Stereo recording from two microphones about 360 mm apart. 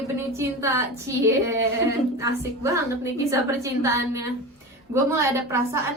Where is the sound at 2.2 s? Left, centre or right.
Centre.